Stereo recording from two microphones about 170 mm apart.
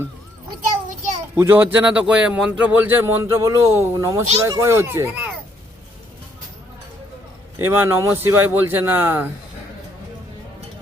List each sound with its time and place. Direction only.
1.4 s speech: 15° right (ahead or behind)
7.6 s speech: 15° right (ahead or behind)